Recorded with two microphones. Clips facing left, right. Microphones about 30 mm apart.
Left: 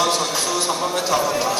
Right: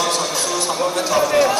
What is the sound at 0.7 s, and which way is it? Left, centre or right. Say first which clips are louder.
Speech: right 2 dB; centre.